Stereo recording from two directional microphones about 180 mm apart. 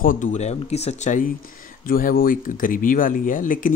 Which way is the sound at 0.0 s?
45° left (ahead or behind).